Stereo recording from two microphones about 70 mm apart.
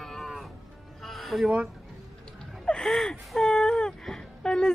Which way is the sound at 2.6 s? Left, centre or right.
Centre.